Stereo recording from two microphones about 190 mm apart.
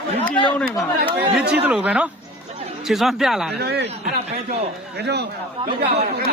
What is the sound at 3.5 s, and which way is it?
Speech, 60° right (ahead or behind).